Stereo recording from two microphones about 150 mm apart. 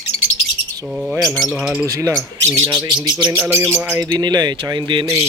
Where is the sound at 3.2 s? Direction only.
15° right (ahead or behind).